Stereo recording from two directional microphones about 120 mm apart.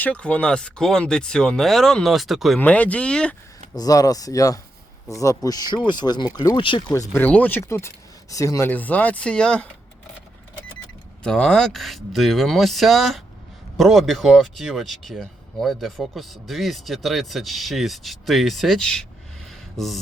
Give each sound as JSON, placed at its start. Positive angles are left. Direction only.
{"t": 0.0, "sound": "speech", "side_deg": 10}
{"t": 2.6, "sound": "speech", "side_deg": 10}
{"t": 3.8, "sound": "speech", "side_deg": 30}
{"t": 6.9, "sound": "speech", "side_deg": 25}
{"t": 7.2, "sound": "speech", "side_deg": 10}
{"t": 7.7, "sound": "speech", "side_deg": 25}
{"t": 8.7, "sound": "speech", "side_deg": 15}
{"t": 11.2, "sound": "speech", "side_deg": 10}
{"t": 19.5, "sound": "a sound", "side_deg": 0}